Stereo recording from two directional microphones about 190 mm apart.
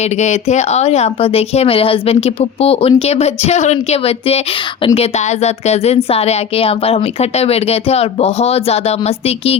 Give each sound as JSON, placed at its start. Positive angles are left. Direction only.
{"t": 0.0, "sound": "a woman's voice", "side_deg": 35}